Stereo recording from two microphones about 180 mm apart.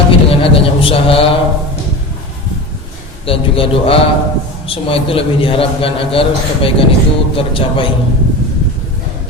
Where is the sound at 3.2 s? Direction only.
30° left (ahead or behind).